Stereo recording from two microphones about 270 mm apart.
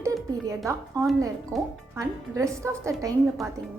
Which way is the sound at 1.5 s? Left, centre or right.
Centre.